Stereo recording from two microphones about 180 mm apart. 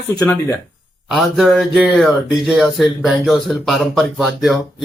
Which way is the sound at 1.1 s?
Centre (ahead or behind).